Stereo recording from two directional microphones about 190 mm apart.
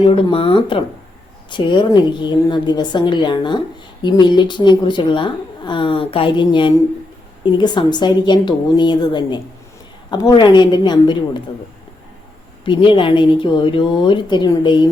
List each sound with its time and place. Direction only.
0.0 s a woman's voice: 25° left (ahead or behind)
12.6 s a woman's voice: 25° left (ahead or behind)